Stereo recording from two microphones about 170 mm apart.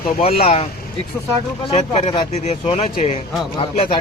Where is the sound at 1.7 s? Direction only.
40° left (ahead or behind).